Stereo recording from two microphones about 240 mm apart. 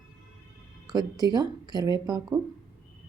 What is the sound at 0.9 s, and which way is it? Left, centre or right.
A woman's voice, centre.